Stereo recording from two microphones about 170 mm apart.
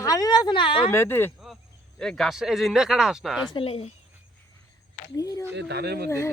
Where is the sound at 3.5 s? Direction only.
35° left (ahead or behind).